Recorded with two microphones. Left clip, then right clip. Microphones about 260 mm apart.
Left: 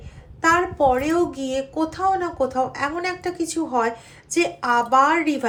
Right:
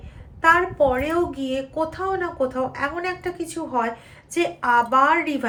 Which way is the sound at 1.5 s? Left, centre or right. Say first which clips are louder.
Left 1 dB; centre.